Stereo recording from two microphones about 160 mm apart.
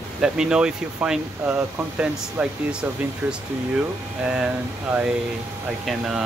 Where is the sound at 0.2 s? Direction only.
5° right (ahead or behind).